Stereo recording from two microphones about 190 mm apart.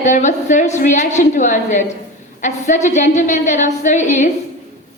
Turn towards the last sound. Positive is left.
turn(degrees=40)  # may be behind; listen again after turning